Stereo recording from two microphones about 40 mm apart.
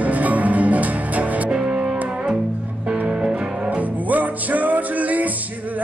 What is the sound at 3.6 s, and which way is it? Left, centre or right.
Music, right.